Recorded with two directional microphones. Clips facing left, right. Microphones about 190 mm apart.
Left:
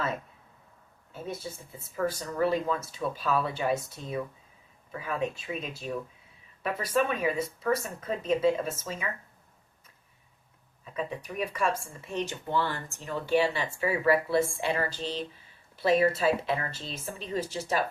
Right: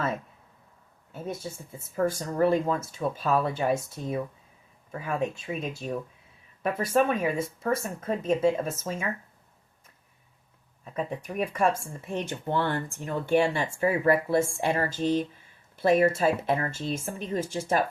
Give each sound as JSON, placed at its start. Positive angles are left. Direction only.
{"t": 2.0, "sound": "speech", "side_deg": -50}
{"t": 10.9, "sound": "speech", "side_deg": -50}